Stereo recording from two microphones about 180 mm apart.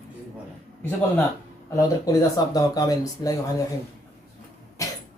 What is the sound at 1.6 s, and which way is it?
Speech, 15° left (ahead or behind).